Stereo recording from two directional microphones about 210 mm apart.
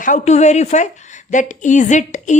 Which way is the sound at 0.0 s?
35° left (ahead or behind).